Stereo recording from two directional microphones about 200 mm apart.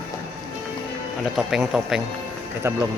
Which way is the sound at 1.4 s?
Centre (ahead or behind).